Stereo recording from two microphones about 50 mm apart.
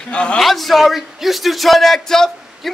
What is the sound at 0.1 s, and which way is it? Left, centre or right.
Speech, left.